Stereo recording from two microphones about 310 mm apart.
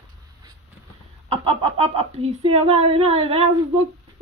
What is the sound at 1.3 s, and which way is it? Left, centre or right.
Speech, centre.